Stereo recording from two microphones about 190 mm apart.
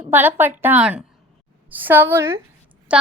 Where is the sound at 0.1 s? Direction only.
10° right (ahead or behind).